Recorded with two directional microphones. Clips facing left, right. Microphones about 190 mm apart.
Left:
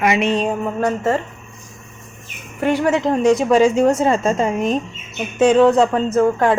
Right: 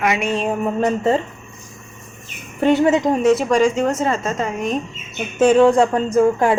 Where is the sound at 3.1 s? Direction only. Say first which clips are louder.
Left 1 dB; 5° right (ahead or behind).